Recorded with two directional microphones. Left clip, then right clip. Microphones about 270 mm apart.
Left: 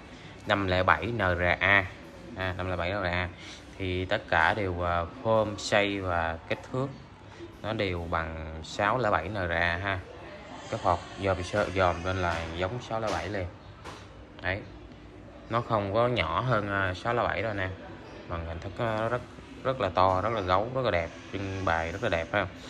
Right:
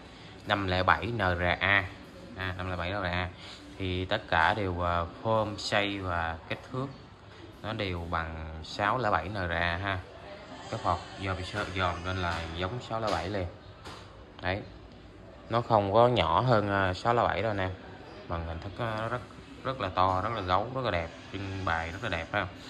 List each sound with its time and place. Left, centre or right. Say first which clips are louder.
0.5 s a man's voice: left 2 dB; centre